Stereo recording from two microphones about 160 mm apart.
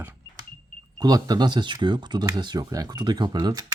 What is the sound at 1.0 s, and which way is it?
Speech, 25° right (ahead or behind).